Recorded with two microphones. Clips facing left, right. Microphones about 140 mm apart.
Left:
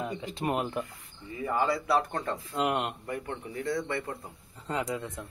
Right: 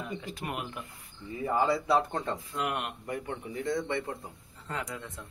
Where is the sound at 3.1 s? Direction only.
15° right (ahead or behind).